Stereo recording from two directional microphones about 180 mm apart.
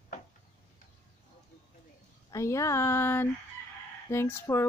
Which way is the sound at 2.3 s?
15° left (ahead or behind).